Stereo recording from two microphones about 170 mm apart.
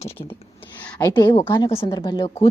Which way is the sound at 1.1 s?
25° left (ahead or behind).